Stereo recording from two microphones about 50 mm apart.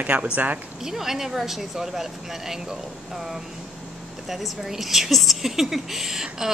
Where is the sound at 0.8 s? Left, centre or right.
Centre.